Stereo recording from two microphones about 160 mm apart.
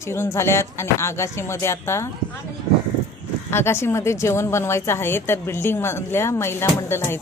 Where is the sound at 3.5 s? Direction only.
15° left (ahead or behind).